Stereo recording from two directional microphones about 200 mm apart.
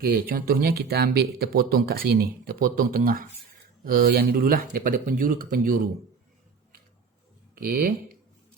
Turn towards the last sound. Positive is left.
turn(degrees=-45)  # may be behind; listen again after turning